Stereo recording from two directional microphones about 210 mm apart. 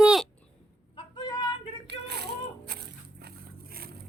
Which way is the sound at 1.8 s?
50° right (ahead or behind).